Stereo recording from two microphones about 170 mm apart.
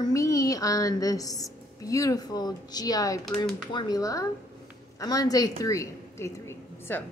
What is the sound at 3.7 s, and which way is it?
A child's voice, 20° left (ahead or behind).